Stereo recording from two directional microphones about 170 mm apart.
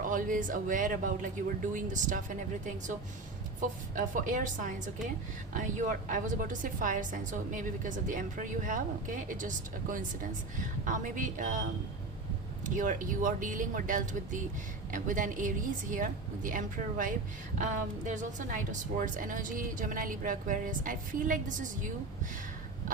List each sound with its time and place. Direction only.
0.0 s a woman's voice: 50° right (ahead or behind)